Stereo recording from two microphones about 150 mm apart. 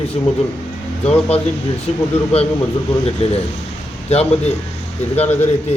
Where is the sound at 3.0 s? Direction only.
40° left (ahead or behind).